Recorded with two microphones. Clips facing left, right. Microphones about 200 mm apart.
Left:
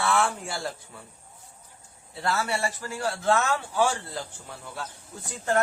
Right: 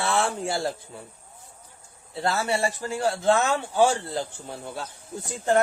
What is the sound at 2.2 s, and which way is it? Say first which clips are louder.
Speech: right 3 dB; 25° right (ahead or behind).